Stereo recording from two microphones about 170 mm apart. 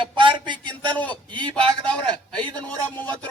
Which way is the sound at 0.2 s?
30° right (ahead or behind).